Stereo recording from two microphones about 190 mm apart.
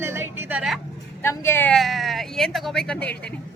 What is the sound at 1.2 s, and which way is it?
Speech, 15° left (ahead or behind).